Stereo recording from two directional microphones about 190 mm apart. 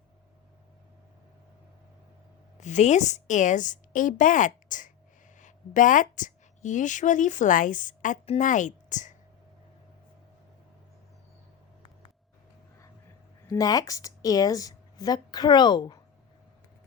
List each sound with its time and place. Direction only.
2.6 s a woman's voice: 40° left (ahead or behind)
13.5 s speech: 20° left (ahead or behind)